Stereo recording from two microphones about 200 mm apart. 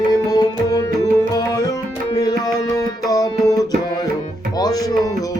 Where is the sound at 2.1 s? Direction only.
20° left (ahead or behind).